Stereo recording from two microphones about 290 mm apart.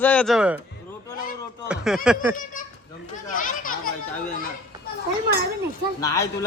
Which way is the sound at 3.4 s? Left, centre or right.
Left.